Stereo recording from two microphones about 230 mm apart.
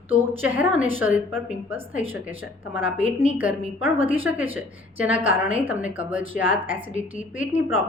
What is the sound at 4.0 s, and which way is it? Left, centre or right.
Speech, right.